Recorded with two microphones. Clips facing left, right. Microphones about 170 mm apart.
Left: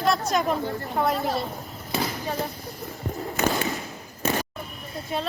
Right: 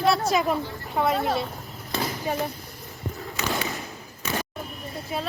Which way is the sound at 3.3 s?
50° left (ahead or behind).